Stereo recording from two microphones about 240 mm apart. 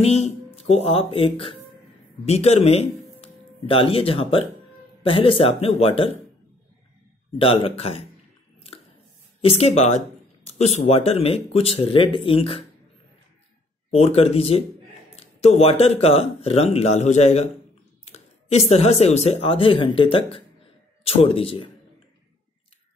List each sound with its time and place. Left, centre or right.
0.0 s speech: left
7.3 s speech: left
9.4 s speech: left
13.8 s speech: left